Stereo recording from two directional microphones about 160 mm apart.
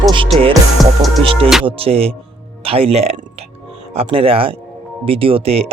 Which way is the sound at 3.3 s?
40° right (ahead or behind).